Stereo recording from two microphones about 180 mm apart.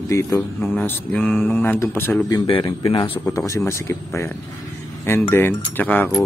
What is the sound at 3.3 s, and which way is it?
Speech, 15° left (ahead or behind).